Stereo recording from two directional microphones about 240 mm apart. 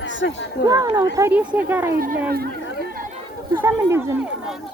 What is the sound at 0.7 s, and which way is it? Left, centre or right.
Speech, centre.